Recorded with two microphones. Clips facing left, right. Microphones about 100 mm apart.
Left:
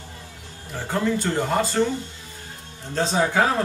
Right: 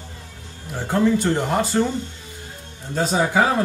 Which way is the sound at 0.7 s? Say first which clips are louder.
Right 5 dB; 5° right (ahead or behind).